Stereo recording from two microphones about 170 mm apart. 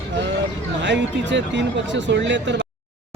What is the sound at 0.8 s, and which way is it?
Speech, 90° right.